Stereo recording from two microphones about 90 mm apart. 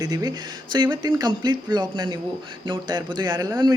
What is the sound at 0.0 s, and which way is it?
Speech, 45° right (ahead or behind).